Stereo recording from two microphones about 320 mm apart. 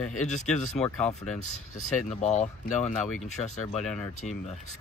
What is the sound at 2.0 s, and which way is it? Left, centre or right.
Speech, left.